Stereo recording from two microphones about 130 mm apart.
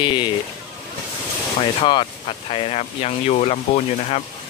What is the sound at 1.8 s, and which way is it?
Speech, 40° left (ahead or behind).